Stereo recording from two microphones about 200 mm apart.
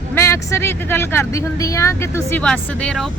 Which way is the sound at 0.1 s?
15° left (ahead or behind).